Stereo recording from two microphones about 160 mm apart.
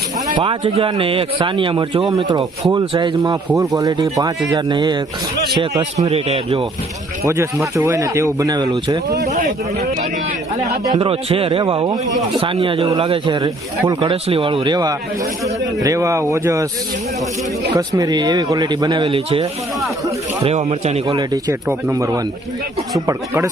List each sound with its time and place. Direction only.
0.3 s a man's voice: 30° right (ahead or behind)
6.1 s a man's voice: 40° right (ahead or behind)
7.3 s speech: 15° right (ahead or behind)
10.9 s a man's voice: 35° right (ahead or behind); by 16.6 s 20° right (ahead or behind)
17.7 s a man's voice: 20° right (ahead or behind); by 21.2 s 40° right (ahead or behind)
21.2 s speech: 20° right (ahead or behind)